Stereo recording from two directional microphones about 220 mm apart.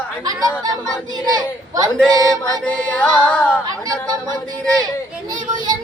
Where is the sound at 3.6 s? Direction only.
15° right (ahead or behind).